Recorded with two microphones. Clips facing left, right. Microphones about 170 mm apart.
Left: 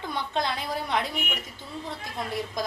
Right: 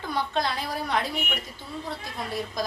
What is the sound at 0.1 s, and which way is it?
A woman's voice, 20° left (ahead or behind).